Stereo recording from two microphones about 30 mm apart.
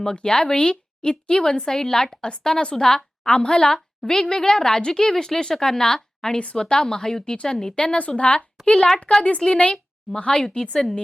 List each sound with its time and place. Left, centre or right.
0.0 s a woman's voice: left
8.1 s a woman's voice: left